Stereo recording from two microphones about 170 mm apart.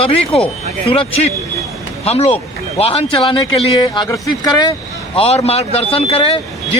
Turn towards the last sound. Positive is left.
turn(degrees=35)  # may be behind; listen again after turning